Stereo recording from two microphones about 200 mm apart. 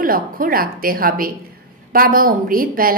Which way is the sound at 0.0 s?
45° right (ahead or behind).